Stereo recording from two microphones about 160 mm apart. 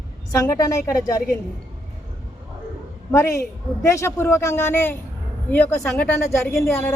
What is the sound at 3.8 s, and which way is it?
A man's voice, 15° left (ahead or behind).